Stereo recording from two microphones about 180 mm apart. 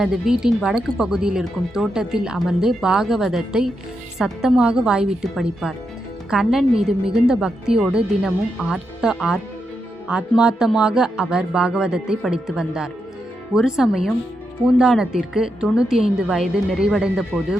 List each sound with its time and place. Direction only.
0.0 s speech: 5° right (ahead or behind)